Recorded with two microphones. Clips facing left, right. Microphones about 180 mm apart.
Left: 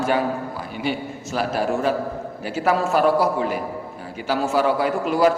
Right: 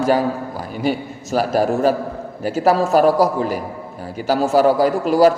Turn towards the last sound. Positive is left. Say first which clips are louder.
# right 5 dB
turn(degrees=-40)  # may be behind; listen again after turning